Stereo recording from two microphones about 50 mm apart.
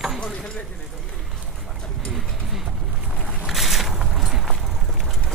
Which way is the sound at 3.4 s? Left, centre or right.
Centre.